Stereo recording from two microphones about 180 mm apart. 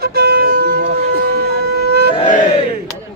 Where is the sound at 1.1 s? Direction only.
65° right (ahead or behind).